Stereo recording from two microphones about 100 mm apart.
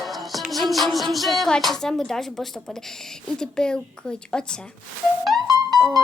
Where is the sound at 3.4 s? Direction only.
10° left (ahead or behind).